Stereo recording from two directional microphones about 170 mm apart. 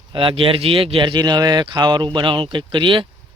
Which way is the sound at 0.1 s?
30° right (ahead or behind).